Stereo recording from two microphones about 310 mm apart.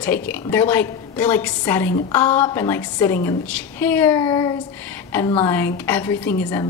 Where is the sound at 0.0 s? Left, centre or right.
Centre.